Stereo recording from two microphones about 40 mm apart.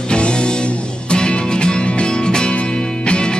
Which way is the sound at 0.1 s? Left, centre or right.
Left.